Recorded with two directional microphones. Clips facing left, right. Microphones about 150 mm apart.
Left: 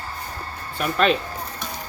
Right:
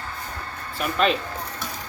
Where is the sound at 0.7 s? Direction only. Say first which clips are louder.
Left 2 dB; centre (ahead or behind).